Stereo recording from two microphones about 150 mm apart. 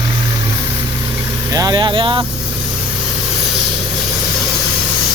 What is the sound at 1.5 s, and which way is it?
Speech, 25° right (ahead or behind).